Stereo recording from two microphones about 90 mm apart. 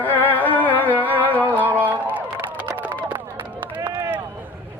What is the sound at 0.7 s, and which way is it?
Music, 20° right (ahead or behind).